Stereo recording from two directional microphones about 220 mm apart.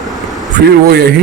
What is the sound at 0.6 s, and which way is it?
Speech, 45° right (ahead or behind).